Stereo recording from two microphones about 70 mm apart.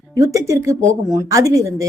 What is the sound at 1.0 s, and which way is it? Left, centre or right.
Speech, right.